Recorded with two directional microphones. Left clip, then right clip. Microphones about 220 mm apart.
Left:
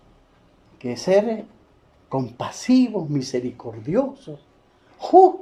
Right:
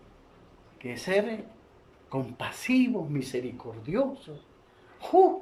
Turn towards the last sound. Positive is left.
turn(degrees=25)  # may be behind; listen again after turning